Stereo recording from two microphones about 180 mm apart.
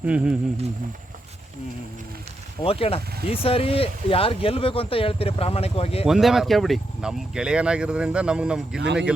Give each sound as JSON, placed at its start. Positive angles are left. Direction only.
{"t": 0.0, "sound": "speech", "side_deg": -5}
{"t": 2.6, "sound": "speech", "side_deg": 35}
{"t": 6.1, "sound": "speech", "side_deg": 0}